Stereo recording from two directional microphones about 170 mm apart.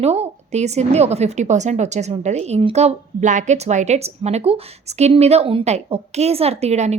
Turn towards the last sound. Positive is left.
turn(degrees=-40)  # may be behind; listen again after turning